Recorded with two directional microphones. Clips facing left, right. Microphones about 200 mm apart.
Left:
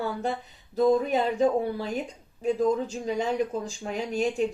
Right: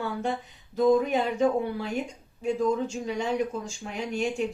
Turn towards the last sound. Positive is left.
turn(degrees=35)  # may be behind; listen again after turning